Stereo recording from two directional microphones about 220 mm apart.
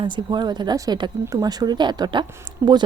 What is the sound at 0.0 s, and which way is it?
Speech, 20° right (ahead or behind).